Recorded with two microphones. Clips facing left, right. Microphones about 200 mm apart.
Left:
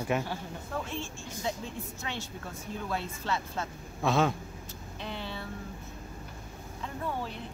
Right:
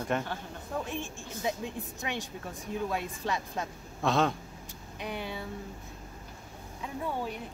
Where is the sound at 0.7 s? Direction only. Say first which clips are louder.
Right 2 dB; 15° right (ahead or behind).